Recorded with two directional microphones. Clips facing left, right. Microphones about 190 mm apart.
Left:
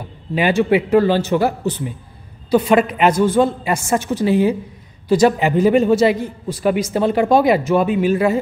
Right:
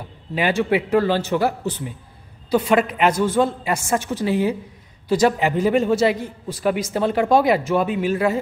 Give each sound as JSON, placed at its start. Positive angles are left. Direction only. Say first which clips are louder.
{"t": 0.3, "sound": "a woman's voice", "louder": "left 4 dB", "side_deg": 15}